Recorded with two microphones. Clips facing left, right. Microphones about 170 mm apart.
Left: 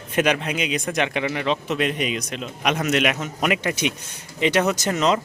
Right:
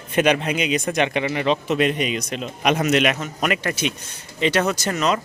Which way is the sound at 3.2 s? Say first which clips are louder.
Even; 15° left (ahead or behind).